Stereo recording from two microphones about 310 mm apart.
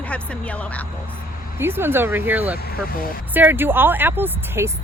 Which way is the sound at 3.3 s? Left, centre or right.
Centre.